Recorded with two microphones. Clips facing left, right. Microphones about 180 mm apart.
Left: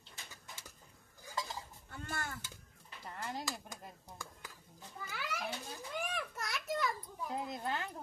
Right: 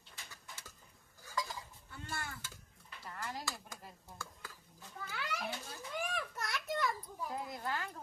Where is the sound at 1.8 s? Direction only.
50° left (ahead or behind).